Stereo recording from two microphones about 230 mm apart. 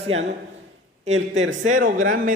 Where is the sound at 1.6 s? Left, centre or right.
Right.